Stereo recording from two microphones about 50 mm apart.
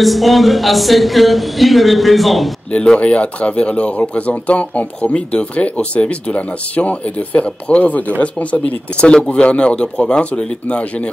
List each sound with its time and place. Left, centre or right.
0.0 s speech: centre
2.7 s speech: centre